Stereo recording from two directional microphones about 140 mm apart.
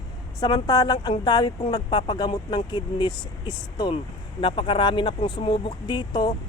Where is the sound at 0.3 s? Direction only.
25° left (ahead or behind).